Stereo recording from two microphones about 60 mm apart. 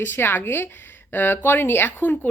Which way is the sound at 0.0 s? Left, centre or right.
Left.